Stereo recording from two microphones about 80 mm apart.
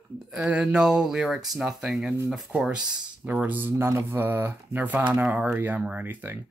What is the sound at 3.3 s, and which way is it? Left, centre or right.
Speech, right.